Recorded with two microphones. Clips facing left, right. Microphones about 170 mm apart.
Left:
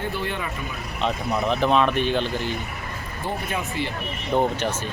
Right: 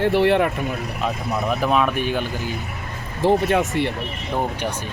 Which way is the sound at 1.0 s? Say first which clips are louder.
Left 1 dB; 5° right (ahead or behind).